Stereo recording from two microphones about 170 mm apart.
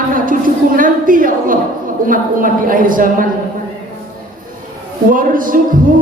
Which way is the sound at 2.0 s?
55° right (ahead or behind).